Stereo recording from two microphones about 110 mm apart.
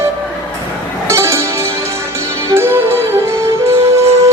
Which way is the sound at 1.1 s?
25° right (ahead or behind).